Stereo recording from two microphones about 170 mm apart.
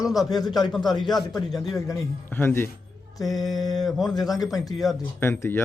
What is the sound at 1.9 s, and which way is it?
Speech, 15° left (ahead or behind).